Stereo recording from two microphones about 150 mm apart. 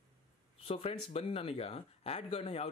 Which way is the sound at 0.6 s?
40° left (ahead or behind).